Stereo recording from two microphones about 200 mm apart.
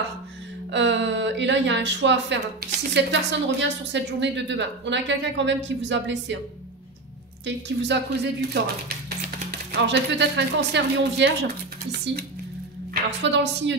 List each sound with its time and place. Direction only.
0.7 s a woman's voice: 65° right (ahead or behind)
7.4 s a woman's voice: 60° right (ahead or behind)
13.2 s a woman's voice: 60° right (ahead or behind)